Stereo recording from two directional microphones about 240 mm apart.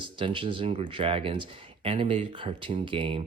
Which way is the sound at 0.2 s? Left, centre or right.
Right.